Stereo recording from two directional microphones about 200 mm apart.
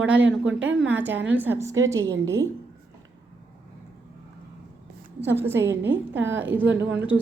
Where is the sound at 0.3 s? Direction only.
75° right (ahead or behind).